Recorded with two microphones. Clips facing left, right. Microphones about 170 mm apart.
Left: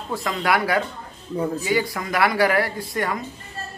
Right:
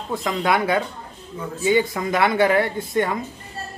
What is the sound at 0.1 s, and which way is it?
Speech, 20° right (ahead or behind).